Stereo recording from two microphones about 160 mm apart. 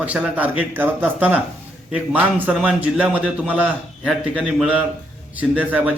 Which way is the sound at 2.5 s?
5° right (ahead or behind).